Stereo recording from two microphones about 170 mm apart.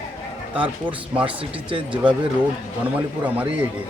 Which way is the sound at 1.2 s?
30° right (ahead or behind).